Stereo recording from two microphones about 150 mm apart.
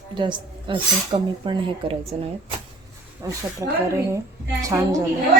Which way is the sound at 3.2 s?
20° right (ahead or behind).